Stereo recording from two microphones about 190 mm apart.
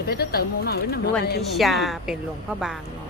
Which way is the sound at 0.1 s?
55° left (ahead or behind).